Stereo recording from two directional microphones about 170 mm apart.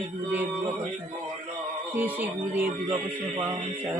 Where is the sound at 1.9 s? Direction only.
10° right (ahead or behind).